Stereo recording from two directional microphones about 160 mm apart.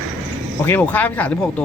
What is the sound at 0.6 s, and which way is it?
Speech, 10° left (ahead or behind).